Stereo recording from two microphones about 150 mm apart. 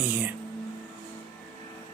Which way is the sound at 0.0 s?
10° right (ahead or behind).